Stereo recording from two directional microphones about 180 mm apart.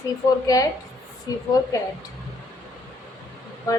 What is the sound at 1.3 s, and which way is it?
Speech, 20° left (ahead or behind).